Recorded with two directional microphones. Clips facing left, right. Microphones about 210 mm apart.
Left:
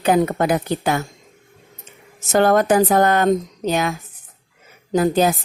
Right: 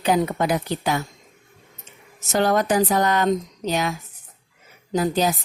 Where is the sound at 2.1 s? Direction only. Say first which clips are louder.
Left 5 dB; 50° left (ahead or behind).